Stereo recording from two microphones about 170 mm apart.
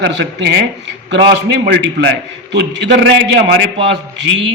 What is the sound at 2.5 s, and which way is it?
A man's voice, 90° right.